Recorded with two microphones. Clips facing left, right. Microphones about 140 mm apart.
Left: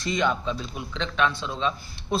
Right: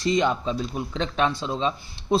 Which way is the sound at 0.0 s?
35° right (ahead or behind).